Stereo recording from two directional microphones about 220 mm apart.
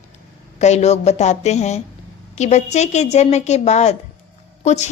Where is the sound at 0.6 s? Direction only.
30° left (ahead or behind).